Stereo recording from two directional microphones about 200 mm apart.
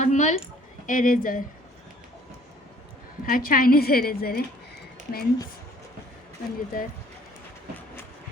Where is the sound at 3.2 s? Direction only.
45° left (ahead or behind).